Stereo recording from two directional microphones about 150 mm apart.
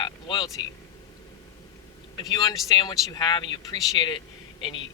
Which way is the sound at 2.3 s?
25° left (ahead or behind).